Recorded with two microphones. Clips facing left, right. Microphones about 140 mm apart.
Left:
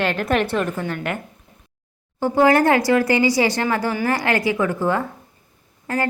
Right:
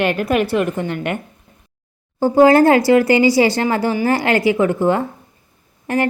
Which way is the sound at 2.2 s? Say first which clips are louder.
Right 5 dB; 30° right (ahead or behind).